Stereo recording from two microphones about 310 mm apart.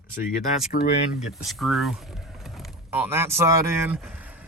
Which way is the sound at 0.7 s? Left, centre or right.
Left.